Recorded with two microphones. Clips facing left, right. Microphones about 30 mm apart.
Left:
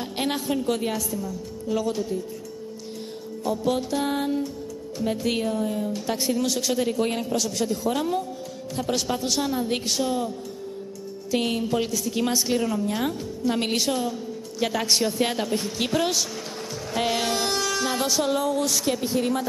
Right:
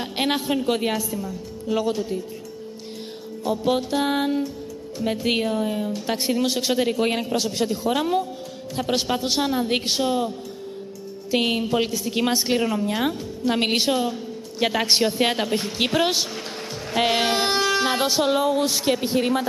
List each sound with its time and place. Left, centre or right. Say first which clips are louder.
0.0 s a woman's voice: right 3 dB; right
3.4 s a woman's voice: right 2 dB; right
11.3 s a woman's voice: right 3 dB; right